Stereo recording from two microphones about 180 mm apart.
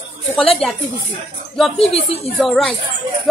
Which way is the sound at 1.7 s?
30° left (ahead or behind).